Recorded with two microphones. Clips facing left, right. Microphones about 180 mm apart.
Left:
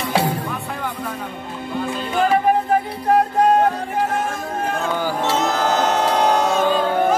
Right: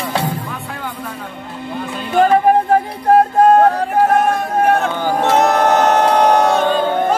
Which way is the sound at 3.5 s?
65° right (ahead or behind).